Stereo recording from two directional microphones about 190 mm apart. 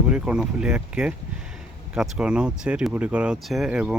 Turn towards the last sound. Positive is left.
turn(degrees=-5)  # may be behind; listen again after turning